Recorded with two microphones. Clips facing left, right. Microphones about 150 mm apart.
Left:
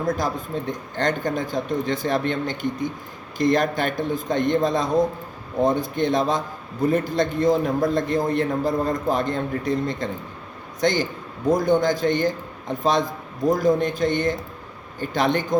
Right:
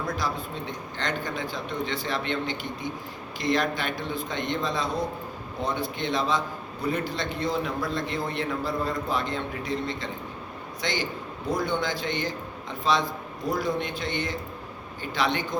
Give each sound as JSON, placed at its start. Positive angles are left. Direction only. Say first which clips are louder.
{"t": 0.0, "sound": "a man's voice", "louder": "left 6 dB", "side_deg": 45}